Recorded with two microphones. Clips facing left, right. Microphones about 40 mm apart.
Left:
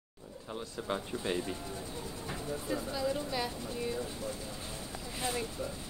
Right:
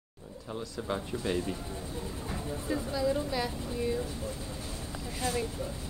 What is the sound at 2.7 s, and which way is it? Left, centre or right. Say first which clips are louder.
Speech: right 4 dB; centre.